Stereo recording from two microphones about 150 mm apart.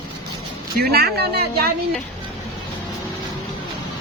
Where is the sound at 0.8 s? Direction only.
90° right.